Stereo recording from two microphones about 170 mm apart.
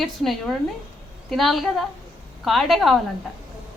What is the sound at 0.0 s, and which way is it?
A woman's voice, centre (ahead or behind).